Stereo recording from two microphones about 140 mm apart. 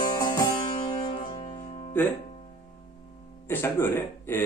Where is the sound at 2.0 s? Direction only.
15° left (ahead or behind).